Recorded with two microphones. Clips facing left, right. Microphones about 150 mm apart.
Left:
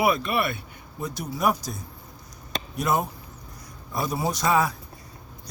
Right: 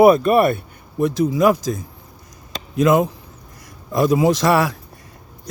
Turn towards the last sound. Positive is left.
turn(degrees=-85)